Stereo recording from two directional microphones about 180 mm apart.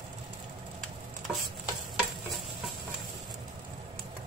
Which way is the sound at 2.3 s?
Centre (ahead or behind).